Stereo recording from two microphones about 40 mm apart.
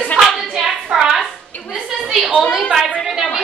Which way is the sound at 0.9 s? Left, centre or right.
Centre.